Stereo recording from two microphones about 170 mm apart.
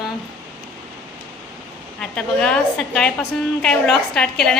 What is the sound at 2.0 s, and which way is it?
A woman's voice, 5° left (ahead or behind).